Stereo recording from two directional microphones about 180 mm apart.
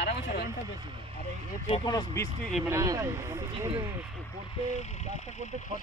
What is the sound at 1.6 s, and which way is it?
Speech, 25° left (ahead or behind).